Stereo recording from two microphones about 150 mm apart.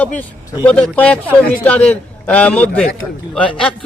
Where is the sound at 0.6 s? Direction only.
10° left (ahead or behind).